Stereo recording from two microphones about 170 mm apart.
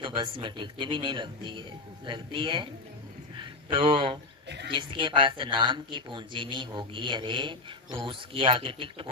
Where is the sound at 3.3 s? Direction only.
30° right (ahead or behind).